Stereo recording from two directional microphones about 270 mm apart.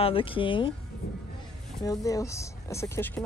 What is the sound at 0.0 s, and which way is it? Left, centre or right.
Speech, centre.